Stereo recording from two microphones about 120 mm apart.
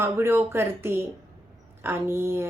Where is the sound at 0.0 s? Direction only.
20° right (ahead or behind).